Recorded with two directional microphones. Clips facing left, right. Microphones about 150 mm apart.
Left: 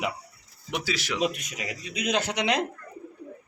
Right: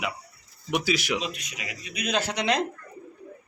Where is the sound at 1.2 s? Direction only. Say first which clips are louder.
Left 5 dB; 55° left (ahead or behind).